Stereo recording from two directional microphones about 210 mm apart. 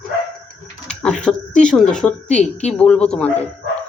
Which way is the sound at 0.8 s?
5° left (ahead or behind).